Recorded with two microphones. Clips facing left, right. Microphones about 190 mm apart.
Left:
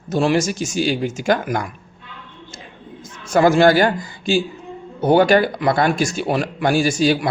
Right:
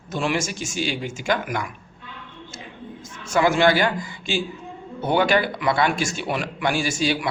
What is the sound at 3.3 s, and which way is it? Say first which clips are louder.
A man's voice: left 5 dB; 40° left (ahead or behind).